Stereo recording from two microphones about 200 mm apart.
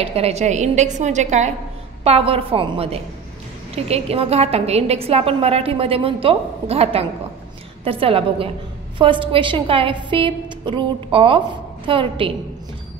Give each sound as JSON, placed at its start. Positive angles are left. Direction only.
{"t": 0.0, "sound": "a woman's voice", "side_deg": -30}